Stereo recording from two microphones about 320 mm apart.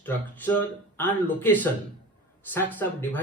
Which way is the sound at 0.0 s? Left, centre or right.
Centre.